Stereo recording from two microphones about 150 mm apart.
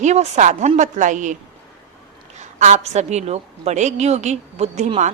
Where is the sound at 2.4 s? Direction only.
50° right (ahead or behind).